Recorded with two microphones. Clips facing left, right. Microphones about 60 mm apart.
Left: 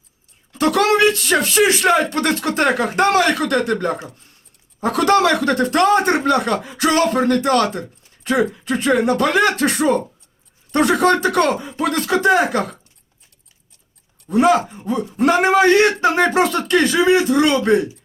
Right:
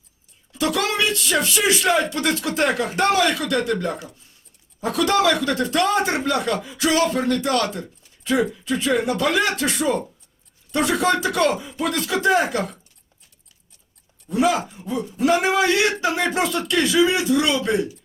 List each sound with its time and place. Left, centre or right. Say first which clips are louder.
0.5 s speech: left 7 dB; left
3.1 s speech: left 4 dB; left
14.3 s speech: left 5 dB; left